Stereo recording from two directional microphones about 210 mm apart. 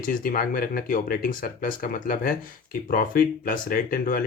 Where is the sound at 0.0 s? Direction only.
40° left (ahead or behind).